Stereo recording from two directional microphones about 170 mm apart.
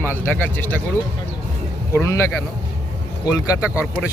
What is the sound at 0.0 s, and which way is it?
Speech, 10° left (ahead or behind).